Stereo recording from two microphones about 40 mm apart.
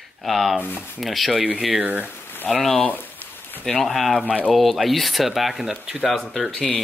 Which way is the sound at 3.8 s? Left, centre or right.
Centre.